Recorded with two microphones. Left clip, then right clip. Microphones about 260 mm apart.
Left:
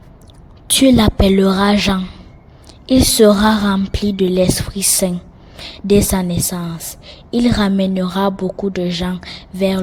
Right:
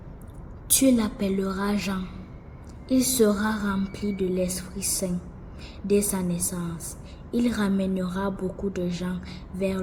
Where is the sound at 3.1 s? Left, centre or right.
Left.